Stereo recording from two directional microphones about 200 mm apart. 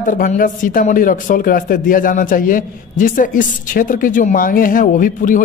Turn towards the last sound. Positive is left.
turn(degrees=40)  # may be behind; listen again after turning